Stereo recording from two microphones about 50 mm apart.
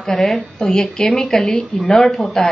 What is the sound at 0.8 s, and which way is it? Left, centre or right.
A woman's voice, centre.